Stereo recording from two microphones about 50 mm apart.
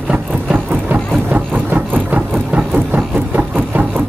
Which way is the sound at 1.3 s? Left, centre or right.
Right.